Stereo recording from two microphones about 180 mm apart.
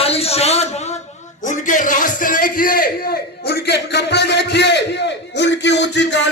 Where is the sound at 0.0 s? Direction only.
35° left (ahead or behind).